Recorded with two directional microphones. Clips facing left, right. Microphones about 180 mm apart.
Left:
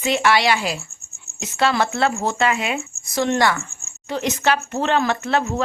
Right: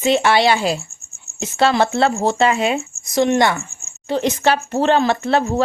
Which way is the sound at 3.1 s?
15° right (ahead or behind).